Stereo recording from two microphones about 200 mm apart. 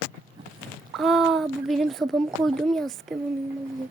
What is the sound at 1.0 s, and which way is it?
A woman's voice, centre (ahead or behind).